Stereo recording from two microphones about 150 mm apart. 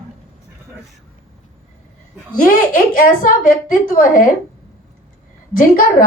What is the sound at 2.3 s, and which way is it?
Speech, 65° left (ahead or behind).